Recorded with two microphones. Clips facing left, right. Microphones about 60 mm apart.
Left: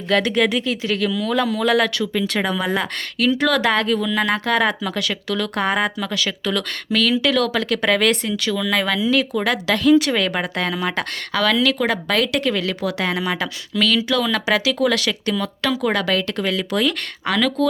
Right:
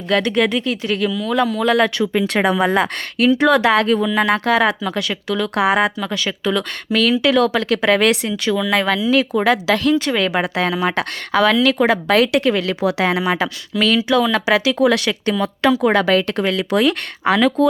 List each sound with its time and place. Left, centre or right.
0.1 s speech: centre
1.6 s speech: right
3.6 s speech: centre
3.8 s speech: right
4.1 s speech: centre
16.3 s speech: right
16.7 s speech: centre